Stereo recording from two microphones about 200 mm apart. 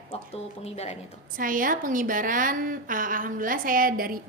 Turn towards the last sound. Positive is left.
turn(degrees=-45)  # may be behind; listen again after turning